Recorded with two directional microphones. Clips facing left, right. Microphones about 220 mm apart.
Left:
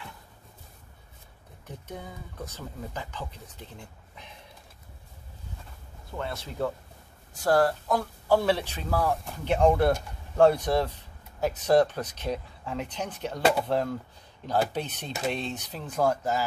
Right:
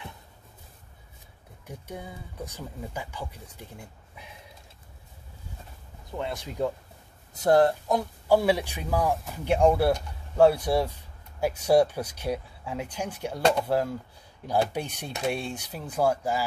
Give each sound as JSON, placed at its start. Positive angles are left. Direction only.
{"t": 1.7, "sound": "speech", "side_deg": -10}
{"t": 6.1, "sound": "speech", "side_deg": -15}
{"t": 13.4, "sound": "speech", "side_deg": 5}
{"t": 13.7, "sound": "speech", "side_deg": -10}